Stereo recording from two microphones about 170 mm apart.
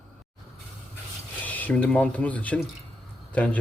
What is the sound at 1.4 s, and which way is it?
A man's voice, 10° left (ahead or behind).